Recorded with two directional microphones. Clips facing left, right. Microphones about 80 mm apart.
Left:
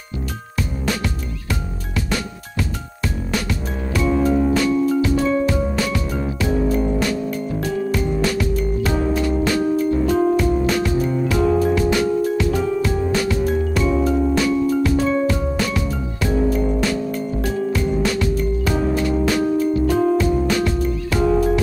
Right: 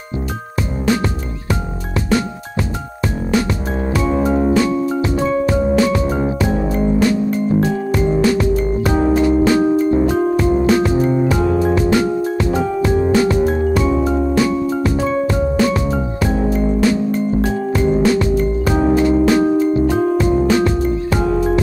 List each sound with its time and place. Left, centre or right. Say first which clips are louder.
3.9 s music: right 1 dB; right
16.4 s music: right 7 dB; right